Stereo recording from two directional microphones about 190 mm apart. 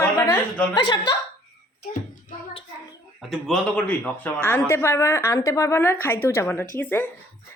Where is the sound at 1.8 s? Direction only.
45° left (ahead or behind).